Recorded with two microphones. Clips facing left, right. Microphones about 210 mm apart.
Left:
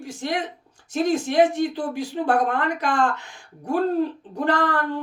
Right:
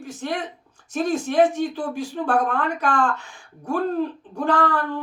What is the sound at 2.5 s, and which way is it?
Speech, 70° left (ahead or behind).